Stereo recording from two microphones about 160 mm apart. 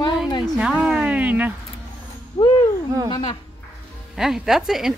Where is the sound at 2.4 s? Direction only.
25° left (ahead or behind).